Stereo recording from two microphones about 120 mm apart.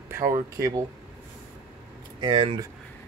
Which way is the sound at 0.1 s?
20° right (ahead or behind).